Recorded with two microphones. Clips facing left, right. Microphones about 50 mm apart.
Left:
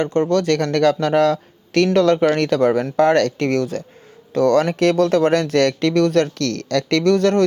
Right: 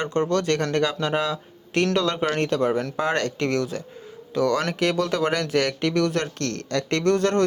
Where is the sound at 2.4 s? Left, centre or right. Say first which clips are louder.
Left 5 dB; left.